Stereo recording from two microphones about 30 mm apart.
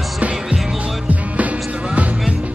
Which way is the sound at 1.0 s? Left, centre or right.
Right.